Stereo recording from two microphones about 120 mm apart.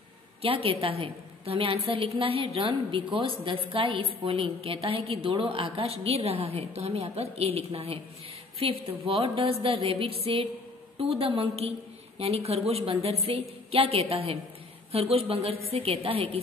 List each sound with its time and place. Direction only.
0.4 s a woman's voice: 55° right (ahead or behind)